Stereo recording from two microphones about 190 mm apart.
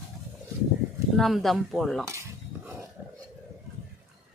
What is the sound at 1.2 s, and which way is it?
Speech, centre (ahead or behind).